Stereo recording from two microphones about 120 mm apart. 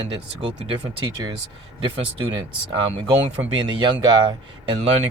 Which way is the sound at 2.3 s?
40° right (ahead or behind).